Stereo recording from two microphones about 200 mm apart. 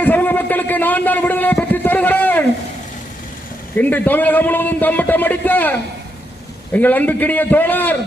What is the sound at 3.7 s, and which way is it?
A man's voice, 10° left (ahead or behind).